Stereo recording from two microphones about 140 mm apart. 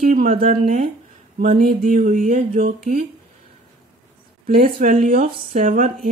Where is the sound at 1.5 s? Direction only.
75° right (ahead or behind).